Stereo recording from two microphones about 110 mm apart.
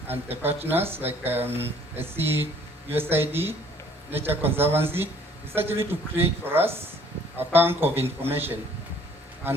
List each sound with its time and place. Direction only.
0.4 s speech: 20° right (ahead or behind)